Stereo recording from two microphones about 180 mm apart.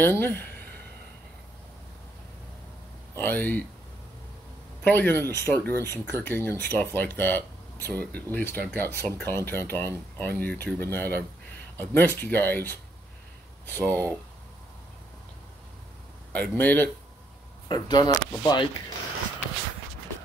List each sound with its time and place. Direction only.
0.0 s speech: 10° left (ahead or behind)
3.2 s speech: 10° left (ahead or behind)
4.8 s speech: 10° left (ahead or behind)
16.3 s speech: 10° left (ahead or behind)
17.6 s speech: 20° left (ahead or behind)